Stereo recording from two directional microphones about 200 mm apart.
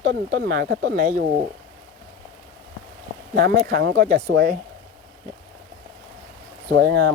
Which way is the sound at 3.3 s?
35° right (ahead or behind).